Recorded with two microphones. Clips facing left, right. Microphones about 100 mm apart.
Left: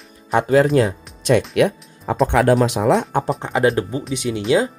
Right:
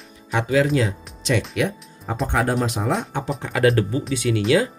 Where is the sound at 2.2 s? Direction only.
75° left (ahead or behind).